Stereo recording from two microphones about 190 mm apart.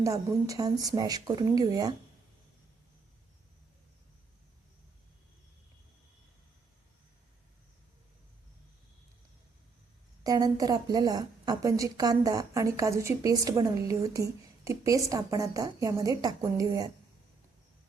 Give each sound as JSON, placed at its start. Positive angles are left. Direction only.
{"t": 0.0, "sound": "speech", "side_deg": -15}
{"t": 10.2, "sound": "a woman's voice", "side_deg": -20}